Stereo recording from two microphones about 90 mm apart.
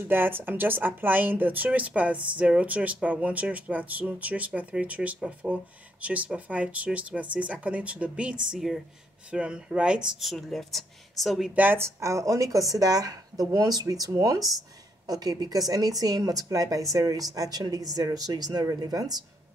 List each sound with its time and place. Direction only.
0.1 s speech: 25° right (ahead or behind)
10.3 s speech: 5° left (ahead or behind)
11.5 s a woman's voice: 20° right (ahead or behind)
12.0 s speech: 35° right (ahead or behind)